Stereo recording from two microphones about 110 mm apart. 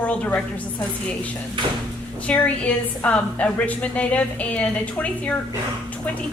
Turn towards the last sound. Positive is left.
turn(degrees=10)  # may be behind; listen again after turning